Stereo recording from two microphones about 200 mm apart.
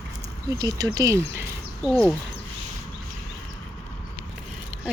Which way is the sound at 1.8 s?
Centre (ahead or behind).